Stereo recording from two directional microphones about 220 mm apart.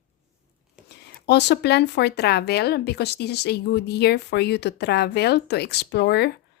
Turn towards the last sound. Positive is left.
turn(degrees=45)  # may be behind; listen again after turning